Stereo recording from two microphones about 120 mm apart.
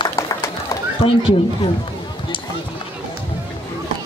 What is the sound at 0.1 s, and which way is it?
Bird, 25° left (ahead or behind).